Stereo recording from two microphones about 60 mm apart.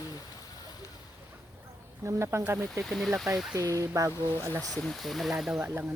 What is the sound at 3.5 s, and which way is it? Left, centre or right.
Speech, right.